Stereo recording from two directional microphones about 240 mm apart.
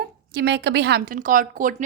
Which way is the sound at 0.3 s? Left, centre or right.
Right.